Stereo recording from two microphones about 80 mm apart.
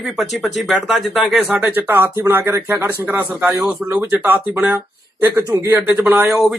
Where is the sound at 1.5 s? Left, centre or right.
Right.